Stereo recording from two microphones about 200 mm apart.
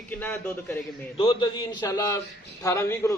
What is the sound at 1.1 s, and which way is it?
A man's voice, 25° left (ahead or behind).